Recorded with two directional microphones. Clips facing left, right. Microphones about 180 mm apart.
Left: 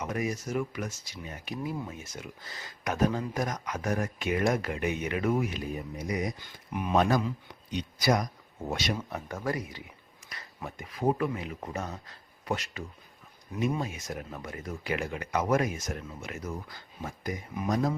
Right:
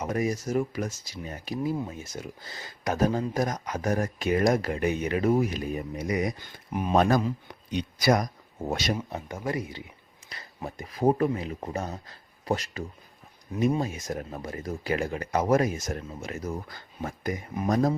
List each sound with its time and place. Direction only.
0.0 s speech: 35° right (ahead or behind)
5.7 s speech: 70° right (ahead or behind)
6.7 s speech: 40° right (ahead or behind)
9.0 s speech: 25° right (ahead or behind); by 17.9 s 45° right (ahead or behind)